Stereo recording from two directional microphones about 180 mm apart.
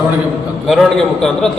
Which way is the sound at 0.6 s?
Centre (ahead or behind).